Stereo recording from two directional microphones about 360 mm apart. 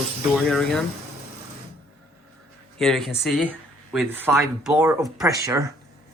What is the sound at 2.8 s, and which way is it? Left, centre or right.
Speech, centre.